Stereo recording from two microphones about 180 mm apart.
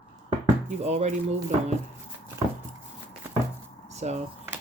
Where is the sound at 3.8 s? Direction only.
40° right (ahead or behind).